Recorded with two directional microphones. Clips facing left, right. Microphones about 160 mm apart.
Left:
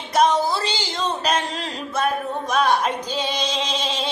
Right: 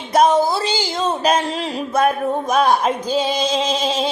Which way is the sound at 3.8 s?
40° right (ahead or behind).